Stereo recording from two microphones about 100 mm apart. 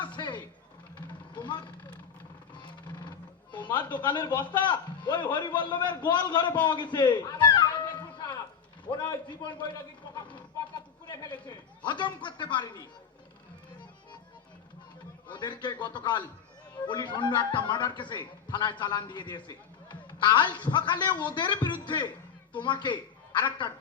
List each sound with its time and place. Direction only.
0.0 s a sound: 50° left (ahead or behind)
0.9 s vehicle: 50° left (ahead or behind)
2.6 s a sound: 55° left (ahead or behind)
3.9 s a man's voice: 50° left (ahead or behind)
7.4 s music: 45° left (ahead or behind)
8.9 s a man's voice: 50° left (ahead or behind)
11.0 s a sound: 45° left (ahead or behind)
11.9 s a man's voice: 50° left (ahead or behind)
15.3 s a man's voice: 50° left (ahead or behind)